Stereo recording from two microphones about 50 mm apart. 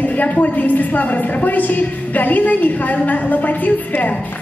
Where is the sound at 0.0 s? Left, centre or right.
Left.